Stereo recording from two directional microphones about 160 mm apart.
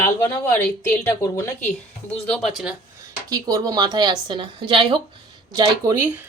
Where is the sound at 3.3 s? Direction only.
25° right (ahead or behind).